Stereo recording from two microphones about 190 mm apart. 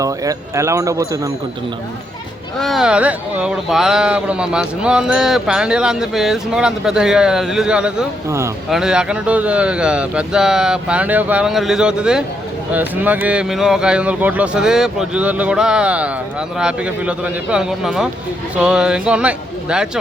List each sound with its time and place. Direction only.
0.0 s speech: 15° right (ahead or behind)
2.6 s speech: centre (ahead or behind)